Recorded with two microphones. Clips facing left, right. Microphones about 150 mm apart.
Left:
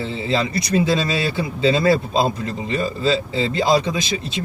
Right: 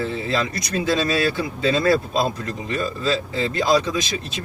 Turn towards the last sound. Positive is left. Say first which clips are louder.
# left 1 dB
turn(degrees=25)  # may be behind; listen again after turning